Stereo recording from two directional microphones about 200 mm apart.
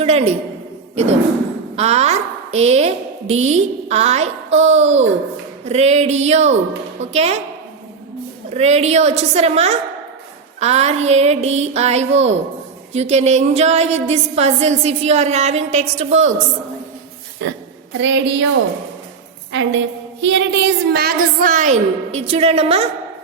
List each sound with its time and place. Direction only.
0.0 s a sound: 30° right (ahead or behind)
1.7 s a woman's voice: 30° right (ahead or behind)
8.4 s a woman's voice: 35° right (ahead or behind)
17.4 s a woman's voice: 60° right (ahead or behind)
19.5 s a woman's voice: 70° right (ahead or behind); by 22.9 s 30° right (ahead or behind)